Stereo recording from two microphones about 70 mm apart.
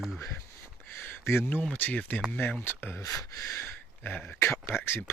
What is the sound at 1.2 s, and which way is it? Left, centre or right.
Speech, left.